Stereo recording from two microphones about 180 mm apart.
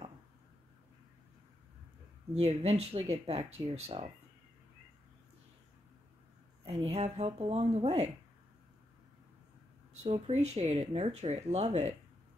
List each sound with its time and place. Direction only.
2.3 s speech: 35° right (ahead or behind)
6.9 s speech: 35° right (ahead or behind)
10.0 s speech: 35° right (ahead or behind)